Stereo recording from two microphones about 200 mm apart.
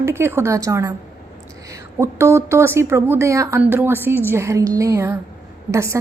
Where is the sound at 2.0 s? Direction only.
15° right (ahead or behind).